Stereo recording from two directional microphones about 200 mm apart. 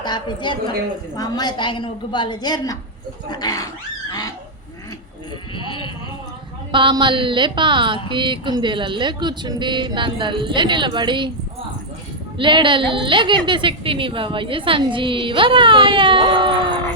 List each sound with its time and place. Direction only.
0.0 s a woman's voice: 20° left (ahead or behind)
5.5 s a woman's voice: 25° left (ahead or behind)
6.7 s a woman's voice: 25° right (ahead or behind)
12.4 s a woman's voice: 25° right (ahead or behind)